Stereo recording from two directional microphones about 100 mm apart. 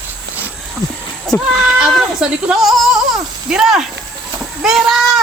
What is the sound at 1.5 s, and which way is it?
A woman's voice, 10° right (ahead or behind).